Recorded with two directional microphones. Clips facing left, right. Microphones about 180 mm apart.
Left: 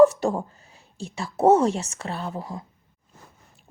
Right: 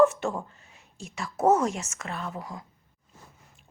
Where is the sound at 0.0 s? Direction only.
35° left (ahead or behind).